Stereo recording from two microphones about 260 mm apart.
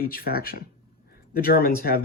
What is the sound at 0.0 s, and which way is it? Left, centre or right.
Speech, left.